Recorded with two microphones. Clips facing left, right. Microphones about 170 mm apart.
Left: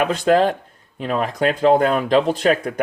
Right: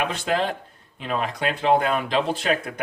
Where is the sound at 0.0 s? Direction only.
45° left (ahead or behind).